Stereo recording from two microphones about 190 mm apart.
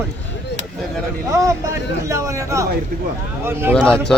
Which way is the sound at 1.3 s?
15° right (ahead or behind).